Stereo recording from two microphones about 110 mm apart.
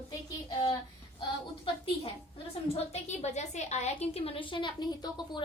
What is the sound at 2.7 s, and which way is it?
A woman's voice, 90° left.